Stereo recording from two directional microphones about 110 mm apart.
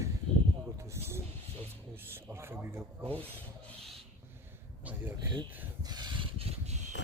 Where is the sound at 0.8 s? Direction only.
25° right (ahead or behind).